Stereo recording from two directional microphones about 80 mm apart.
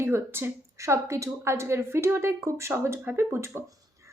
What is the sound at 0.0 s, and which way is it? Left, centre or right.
A woman's voice, right.